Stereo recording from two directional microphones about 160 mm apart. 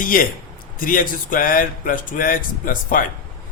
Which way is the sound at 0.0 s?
60° left (ahead or behind).